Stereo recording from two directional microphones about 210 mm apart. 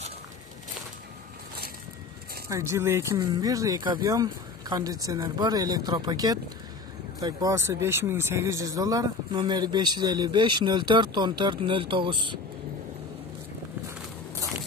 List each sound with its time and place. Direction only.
2.5 s speech: 15° right (ahead or behind)